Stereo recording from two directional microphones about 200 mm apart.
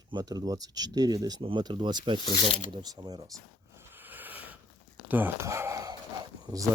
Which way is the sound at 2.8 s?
20° right (ahead or behind).